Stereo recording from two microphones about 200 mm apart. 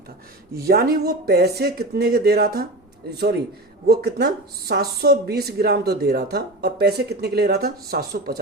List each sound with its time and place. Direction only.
0.6 s speech: 50° right (ahead or behind)